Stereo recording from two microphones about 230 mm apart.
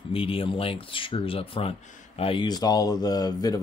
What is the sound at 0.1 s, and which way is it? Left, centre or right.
Speech, left.